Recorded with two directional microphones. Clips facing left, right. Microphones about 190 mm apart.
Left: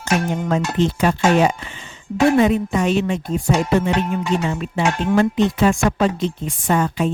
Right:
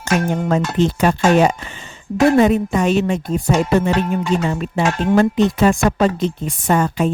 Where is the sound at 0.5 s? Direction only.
45° right (ahead or behind).